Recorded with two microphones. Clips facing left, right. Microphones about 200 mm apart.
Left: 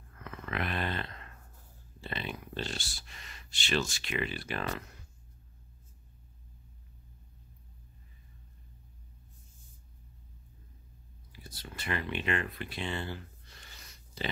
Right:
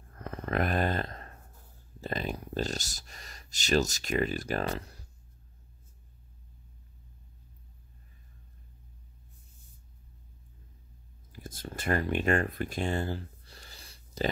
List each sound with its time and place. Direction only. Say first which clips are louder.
0.1 s a sound: right 7 dB; 35° right (ahead or behind)
2.0 s speech: right 5 dB; 40° right (ahead or behind)
11.3 s speech: right 6 dB; 45° right (ahead or behind)